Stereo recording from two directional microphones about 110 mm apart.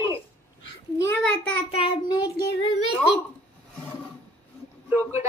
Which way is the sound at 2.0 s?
35° left (ahead or behind).